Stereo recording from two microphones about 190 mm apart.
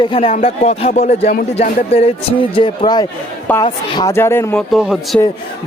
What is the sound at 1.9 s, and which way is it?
Speech, 30° left (ahead or behind).